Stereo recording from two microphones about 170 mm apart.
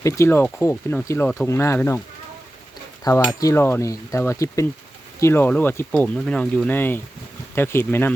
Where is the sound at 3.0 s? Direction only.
20° left (ahead or behind).